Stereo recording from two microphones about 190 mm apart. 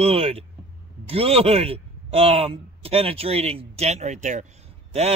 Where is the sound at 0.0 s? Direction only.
30° right (ahead or behind).